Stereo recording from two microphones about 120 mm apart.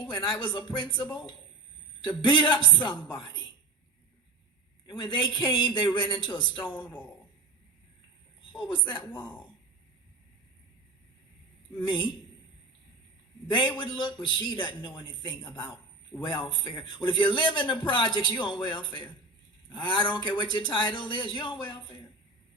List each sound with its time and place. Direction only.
0.0 s a man's voice: 40° left (ahead or behind)
4.9 s a man's voice: 40° left (ahead or behind)
8.7 s a man's voice: 40° left (ahead or behind)
11.8 s a man's voice: 40° left (ahead or behind)
13.5 s a man's voice: 40° left (ahead or behind)